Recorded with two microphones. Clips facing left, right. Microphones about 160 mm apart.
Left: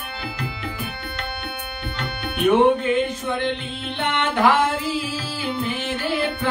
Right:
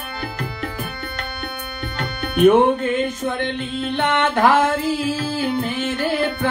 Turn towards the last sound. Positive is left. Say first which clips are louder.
# right 3 dB
turn(degrees=-45)  # may be behind; listen again after turning